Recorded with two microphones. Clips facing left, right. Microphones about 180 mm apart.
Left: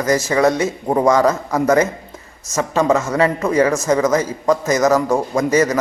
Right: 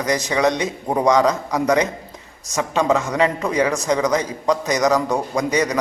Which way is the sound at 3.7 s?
5° left (ahead or behind).